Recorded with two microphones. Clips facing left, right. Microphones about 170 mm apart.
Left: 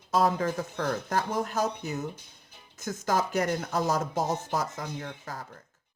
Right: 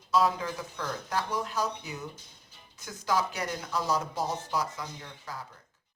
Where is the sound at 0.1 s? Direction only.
45° left (ahead or behind).